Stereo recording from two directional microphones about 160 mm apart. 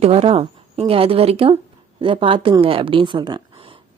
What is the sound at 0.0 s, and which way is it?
A woman's voice, 40° right (ahead or behind).